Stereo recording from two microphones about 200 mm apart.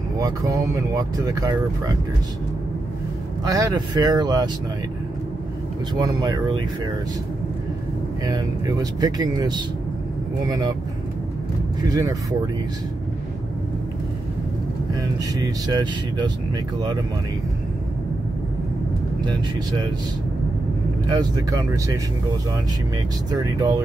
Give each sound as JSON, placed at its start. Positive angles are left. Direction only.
{"t": 0.2, "sound": "speech", "side_deg": -20}
{"t": 3.4, "sound": "speech", "side_deg": -20}
{"t": 5.9, "sound": "speech", "side_deg": -20}
{"t": 8.3, "sound": "speech", "side_deg": -20}
{"t": 11.9, "sound": "speech", "side_deg": -20}
{"t": 15.3, "sound": "speech", "side_deg": -20}
{"t": 21.1, "sound": "speech", "side_deg": -20}
{"t": 23.3, "sound": "speech", "side_deg": -20}